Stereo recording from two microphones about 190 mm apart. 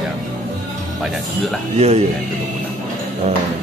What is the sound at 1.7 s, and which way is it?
Speech, 35° right (ahead or behind).